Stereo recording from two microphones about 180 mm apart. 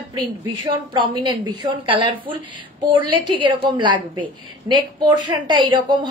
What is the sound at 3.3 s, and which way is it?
A woman's voice, 25° right (ahead or behind).